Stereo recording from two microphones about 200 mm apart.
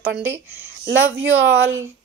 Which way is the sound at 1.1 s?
75° right (ahead or behind).